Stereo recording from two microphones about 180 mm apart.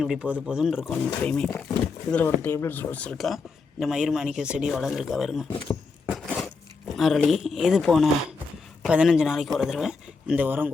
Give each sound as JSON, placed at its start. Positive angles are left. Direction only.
{"t": 0.0, "sound": "speech", "side_deg": -5}
{"t": 1.2, "sound": "speech", "side_deg": 10}
{"t": 6.1, "sound": "a sound", "side_deg": 0}
{"t": 8.8, "sound": "speech", "side_deg": -5}